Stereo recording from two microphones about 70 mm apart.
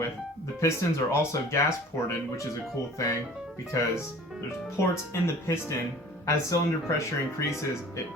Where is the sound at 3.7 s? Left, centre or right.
Left.